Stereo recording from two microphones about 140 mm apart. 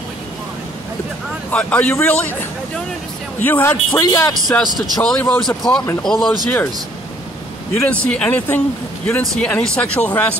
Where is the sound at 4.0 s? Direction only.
25° left (ahead or behind).